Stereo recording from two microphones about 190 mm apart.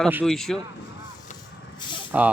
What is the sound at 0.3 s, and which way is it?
Speech, centre (ahead or behind).